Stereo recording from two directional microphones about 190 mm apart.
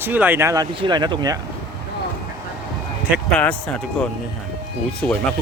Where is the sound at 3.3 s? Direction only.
5° left (ahead or behind).